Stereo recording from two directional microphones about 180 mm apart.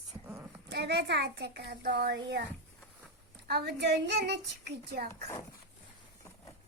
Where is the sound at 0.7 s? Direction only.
70° right (ahead or behind).